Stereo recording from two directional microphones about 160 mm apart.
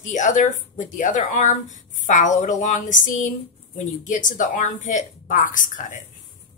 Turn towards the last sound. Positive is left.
turn(degrees=55)  # may be behind; listen again after turning